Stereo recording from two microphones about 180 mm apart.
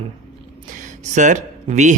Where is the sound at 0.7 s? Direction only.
45° right (ahead or behind).